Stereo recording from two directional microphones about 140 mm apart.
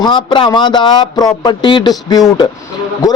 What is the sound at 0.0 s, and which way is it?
Speech, 35° left (ahead or behind).